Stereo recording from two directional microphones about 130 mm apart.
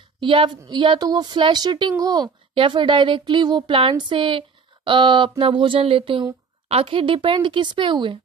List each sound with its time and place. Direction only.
0.2 s a woman's voice: 40° right (ahead or behind)